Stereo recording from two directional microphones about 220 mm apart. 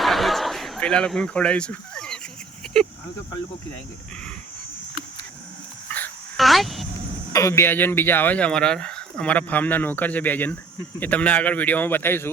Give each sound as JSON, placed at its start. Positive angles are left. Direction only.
{"t": 0.0, "sound": "a sound", "side_deg": 0}
{"t": 5.9, "sound": "dog", "side_deg": 5}
{"t": 7.3, "sound": "speech", "side_deg": 15}